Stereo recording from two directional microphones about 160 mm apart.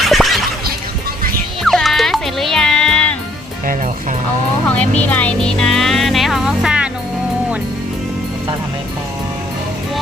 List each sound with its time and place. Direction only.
0.0 s a sound: centre (ahead or behind)
1.6 s music: centre (ahead or behind)
4.7 s music: 10° left (ahead or behind)